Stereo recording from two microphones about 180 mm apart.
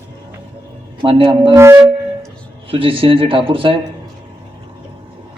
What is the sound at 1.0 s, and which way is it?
Speech, 30° right (ahead or behind).